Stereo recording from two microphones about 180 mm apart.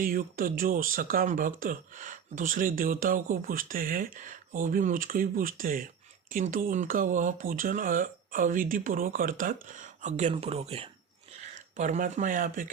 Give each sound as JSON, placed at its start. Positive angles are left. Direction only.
{"t": 0.0, "sound": "speech", "side_deg": -50}